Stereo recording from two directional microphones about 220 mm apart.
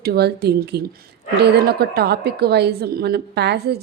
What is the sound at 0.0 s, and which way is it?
Speech, 45° right (ahead or behind).